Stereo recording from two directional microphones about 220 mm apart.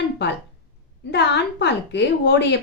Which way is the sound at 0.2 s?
50° left (ahead or behind).